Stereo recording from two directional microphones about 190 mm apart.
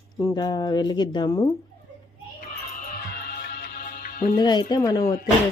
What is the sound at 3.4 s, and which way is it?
Music, 55° left (ahead or behind).